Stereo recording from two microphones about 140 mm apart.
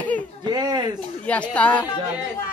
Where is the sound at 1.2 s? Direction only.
10° left (ahead or behind).